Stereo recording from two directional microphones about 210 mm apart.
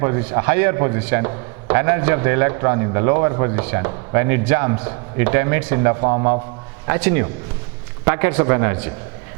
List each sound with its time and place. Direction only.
0.0 s a man's voice: 15° right (ahead or behind)
6.0 s a man's voice: 25° right (ahead or behind)
6.8 s a man's voice: 10° right (ahead or behind)